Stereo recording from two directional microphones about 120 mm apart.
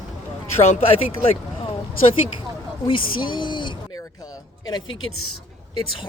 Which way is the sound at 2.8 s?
45° left (ahead or behind).